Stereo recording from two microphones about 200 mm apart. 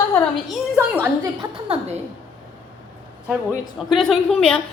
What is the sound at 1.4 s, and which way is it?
Speech, 30° right (ahead or behind).